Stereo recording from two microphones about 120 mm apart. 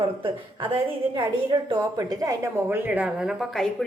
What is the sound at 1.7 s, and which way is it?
Speech, 35° right (ahead or behind).